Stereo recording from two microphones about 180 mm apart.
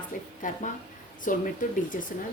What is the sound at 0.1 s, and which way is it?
A woman's voice, 50° left (ahead or behind).